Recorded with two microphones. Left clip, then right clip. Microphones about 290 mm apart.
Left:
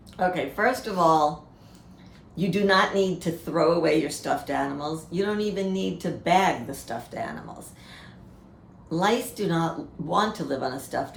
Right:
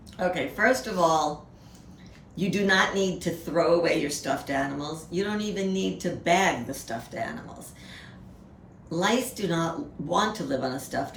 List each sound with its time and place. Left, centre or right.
0.2 s a woman's voice: centre
2.3 s a woman's voice: centre
8.9 s a woman's voice: centre